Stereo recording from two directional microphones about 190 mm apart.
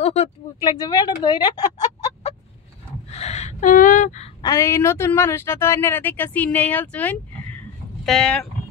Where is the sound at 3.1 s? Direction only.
35° left (ahead or behind).